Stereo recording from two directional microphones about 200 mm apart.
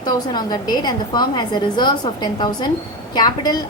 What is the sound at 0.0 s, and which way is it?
A woman's voice, 20° left (ahead or behind).